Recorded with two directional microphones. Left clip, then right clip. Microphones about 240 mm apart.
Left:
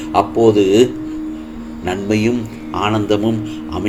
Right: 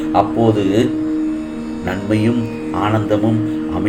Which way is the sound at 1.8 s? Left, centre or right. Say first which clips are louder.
Left 1 dB; left.